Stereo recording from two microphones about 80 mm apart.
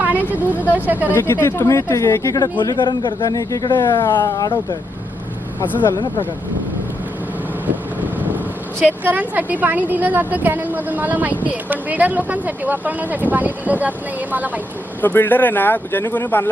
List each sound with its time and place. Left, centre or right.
0.0 s vehicle: right
0.7 s a woman's voice: right
1.1 s speech: left
2.7 s a man's voice: left
3.2 s speech: left
3.8 s speech: left
4.0 s speech: left
8.8 s a woman's voice: right
15.0 s speech: left